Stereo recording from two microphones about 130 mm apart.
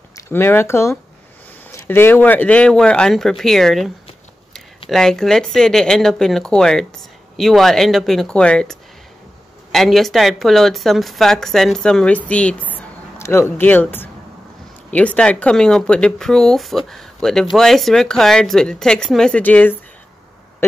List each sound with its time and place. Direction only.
0.3 s speech: 15° left (ahead or behind)